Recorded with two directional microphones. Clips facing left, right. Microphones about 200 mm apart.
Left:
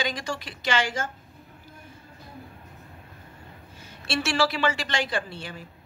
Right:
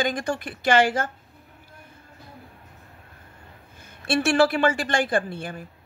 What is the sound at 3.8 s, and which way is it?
A woman's voice, 55° right (ahead or behind).